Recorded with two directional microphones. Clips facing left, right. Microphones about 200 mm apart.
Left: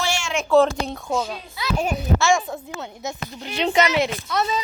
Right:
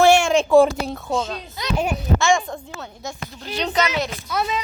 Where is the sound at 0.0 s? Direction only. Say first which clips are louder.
Right 12 dB; 60° right (ahead or behind).